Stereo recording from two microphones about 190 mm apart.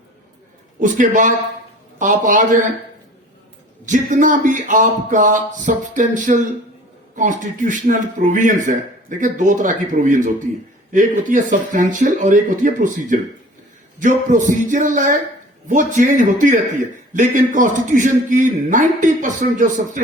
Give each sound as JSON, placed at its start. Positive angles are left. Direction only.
{"t": 0.8, "sound": "speech", "side_deg": -45}
{"t": 3.8, "sound": "speech", "side_deg": -40}